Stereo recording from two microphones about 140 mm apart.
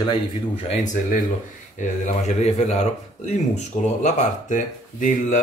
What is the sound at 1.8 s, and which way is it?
Speech, 55° left (ahead or behind).